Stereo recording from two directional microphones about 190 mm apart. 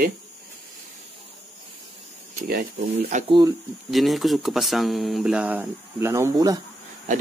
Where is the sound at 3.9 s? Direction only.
Centre (ahead or behind); by 6.5 s 15° right (ahead or behind).